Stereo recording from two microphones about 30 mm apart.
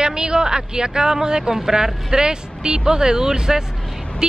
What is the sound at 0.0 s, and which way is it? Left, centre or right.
Speech, right.